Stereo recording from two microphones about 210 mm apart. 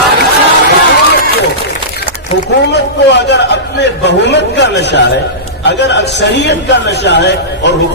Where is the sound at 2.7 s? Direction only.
55° left (ahead or behind).